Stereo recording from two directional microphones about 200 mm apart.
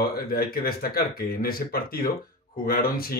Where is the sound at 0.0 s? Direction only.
50° left (ahead or behind).